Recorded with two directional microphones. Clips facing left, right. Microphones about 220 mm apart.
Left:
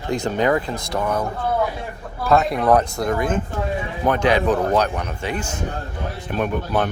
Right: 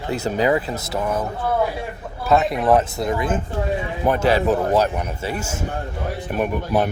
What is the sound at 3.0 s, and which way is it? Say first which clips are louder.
Speech: left 1 dB; 25° right (ahead or behind).